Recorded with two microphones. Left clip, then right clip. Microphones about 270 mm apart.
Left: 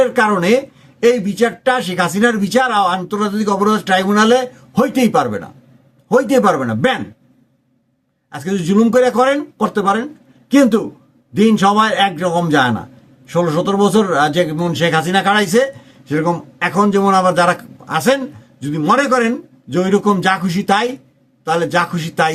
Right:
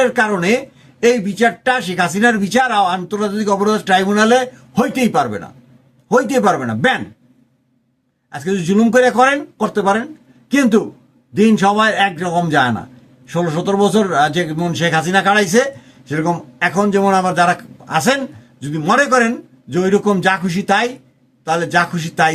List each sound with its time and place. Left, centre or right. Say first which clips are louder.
0.0 s a man's voice: left 1 dB; centre
8.3 s a man's voice: even; centre